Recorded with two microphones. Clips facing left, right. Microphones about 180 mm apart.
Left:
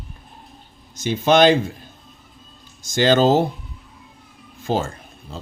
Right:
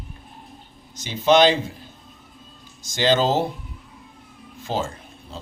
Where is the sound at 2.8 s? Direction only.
50° left (ahead or behind).